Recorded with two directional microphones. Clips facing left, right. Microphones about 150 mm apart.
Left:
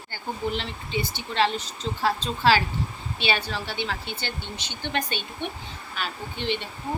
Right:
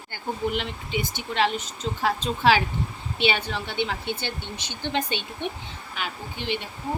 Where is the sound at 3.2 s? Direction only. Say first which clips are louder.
Right 2 dB; 20° right (ahead or behind).